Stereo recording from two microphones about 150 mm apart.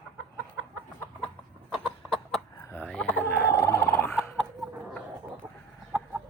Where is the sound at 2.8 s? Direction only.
5° left (ahead or behind).